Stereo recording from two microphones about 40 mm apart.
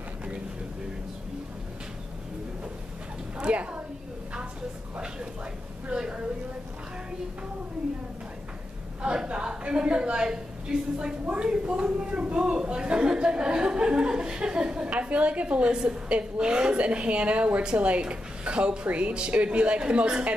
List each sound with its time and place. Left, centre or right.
3.3 s a woman's voice: right
5.9 s a sound: right
9.0 s a woman's voice: right
14.9 s a woman's voice: right